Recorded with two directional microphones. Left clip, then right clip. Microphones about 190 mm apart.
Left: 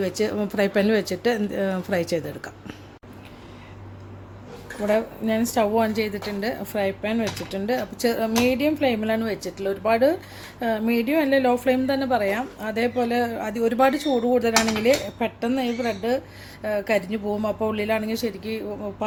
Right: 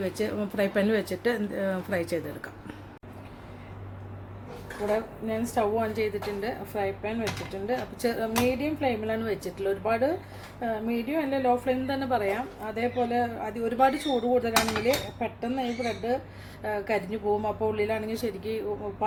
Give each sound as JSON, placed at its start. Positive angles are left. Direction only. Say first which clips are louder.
{"t": 0.0, "sound": "speech", "louder": "left 6 dB", "side_deg": 25}
{"t": 4.9, "sound": "a woman's voice", "louder": "left 7 dB", "side_deg": 35}